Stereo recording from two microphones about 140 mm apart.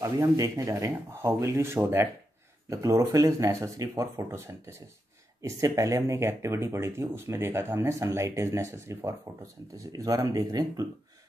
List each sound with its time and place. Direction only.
0.0 s speech: 25° right (ahead or behind)